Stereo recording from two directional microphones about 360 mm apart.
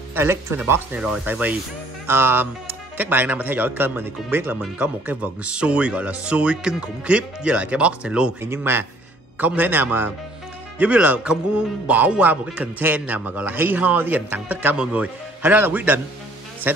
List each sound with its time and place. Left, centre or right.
0.1 s speech: centre